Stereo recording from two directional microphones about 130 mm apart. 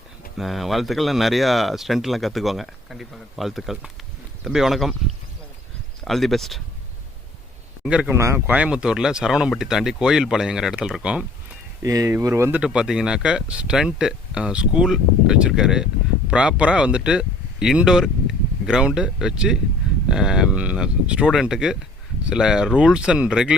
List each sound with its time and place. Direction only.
0.3 s speech: centre (ahead or behind)
6.1 s speech: centre (ahead or behind)
7.9 s speech: 10° right (ahead or behind)
8.1 s speech: 20° right (ahead or behind)
8.5 s speech: 10° right (ahead or behind)
11.8 s speech: 25° right (ahead or behind)
12.5 s speech: 5° right (ahead or behind)